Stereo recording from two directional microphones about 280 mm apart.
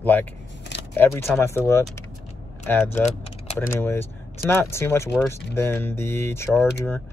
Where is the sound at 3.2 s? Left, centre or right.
Left.